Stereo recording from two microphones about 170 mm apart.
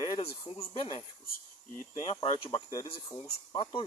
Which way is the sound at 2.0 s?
25° left (ahead or behind).